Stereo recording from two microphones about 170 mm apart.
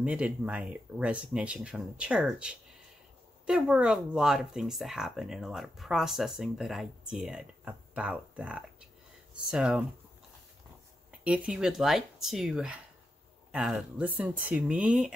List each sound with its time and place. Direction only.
0.0 s speech: 5° right (ahead or behind)
11.1 s speech: 5° right (ahead or behind)